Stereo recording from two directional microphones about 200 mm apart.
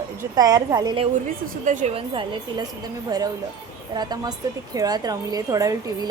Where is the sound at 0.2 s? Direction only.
20° right (ahead or behind).